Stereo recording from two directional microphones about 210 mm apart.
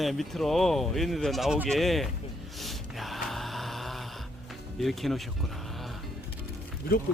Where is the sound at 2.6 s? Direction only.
Centre (ahead or behind).